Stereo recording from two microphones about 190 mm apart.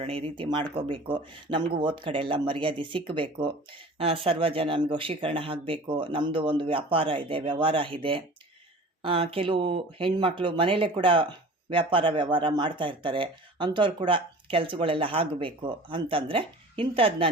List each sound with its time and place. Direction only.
0.0 s speech: 30° right (ahead or behind)